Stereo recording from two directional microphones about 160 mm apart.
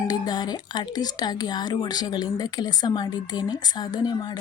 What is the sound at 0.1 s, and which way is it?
Speech, 25° left (ahead or behind).